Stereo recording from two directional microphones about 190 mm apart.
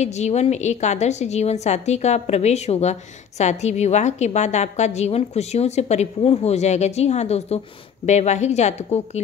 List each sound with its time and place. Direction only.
0.0 s a woman's voice: 35° left (ahead or behind)